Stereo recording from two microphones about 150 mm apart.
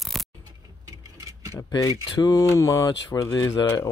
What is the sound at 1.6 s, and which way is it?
Speech, 25° left (ahead or behind).